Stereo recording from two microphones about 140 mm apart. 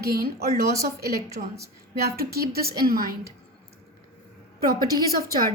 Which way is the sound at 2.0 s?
90° right.